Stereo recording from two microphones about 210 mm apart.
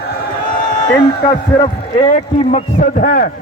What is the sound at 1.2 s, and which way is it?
A man's voice, 20° left (ahead or behind).